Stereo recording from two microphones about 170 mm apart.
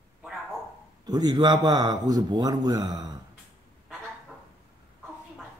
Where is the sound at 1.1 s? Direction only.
25° right (ahead or behind).